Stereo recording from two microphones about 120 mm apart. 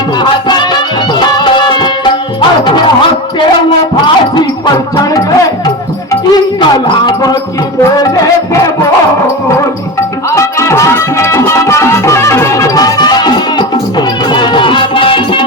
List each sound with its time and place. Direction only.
0.2 s music: 35° left (ahead or behind)
2.6 s speech: 40° left (ahead or behind)
4.0 s music: 40° left (ahead or behind)
6.3 s speech: 40° left (ahead or behind)
8.0 s speech: 30° left (ahead or behind)
10.3 s music: 25° left (ahead or behind); by 15.4 s 45° left (ahead or behind)